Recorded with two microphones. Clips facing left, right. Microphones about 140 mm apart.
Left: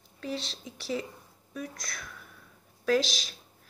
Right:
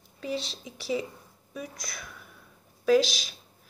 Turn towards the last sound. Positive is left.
turn(degrees=-5)  # may be behind; listen again after turning